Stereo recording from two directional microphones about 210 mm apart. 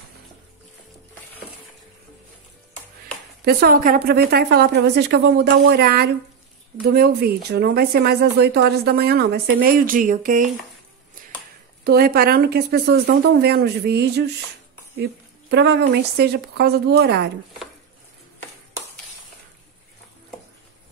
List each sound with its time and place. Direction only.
3.4 s speech: 45° right (ahead or behind)
11.8 s speech: 45° right (ahead or behind)
15.5 s speech: 55° right (ahead or behind)